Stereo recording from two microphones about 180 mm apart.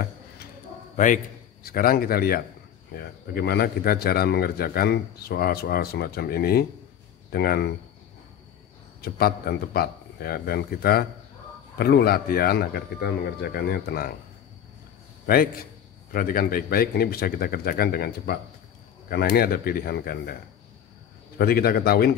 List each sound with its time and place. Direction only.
0.9 s a man's voice: 45° left (ahead or behind)
9.0 s a man's voice: 60° left (ahead or behind)
16.1 s a man's voice: 50° left (ahead or behind)
21.4 s a man's voice: 60° left (ahead or behind)